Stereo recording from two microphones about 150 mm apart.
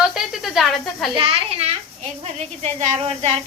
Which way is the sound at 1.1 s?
35° right (ahead or behind).